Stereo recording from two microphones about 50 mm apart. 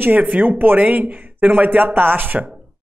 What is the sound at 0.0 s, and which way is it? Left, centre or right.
Speech, right.